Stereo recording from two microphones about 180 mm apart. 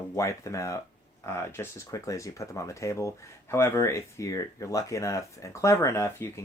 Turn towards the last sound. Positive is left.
turn(degrees=15)  # may be behind; listen again after turning